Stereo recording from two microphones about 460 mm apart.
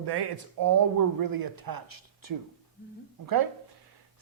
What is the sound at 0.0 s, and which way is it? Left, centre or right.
Speech, right.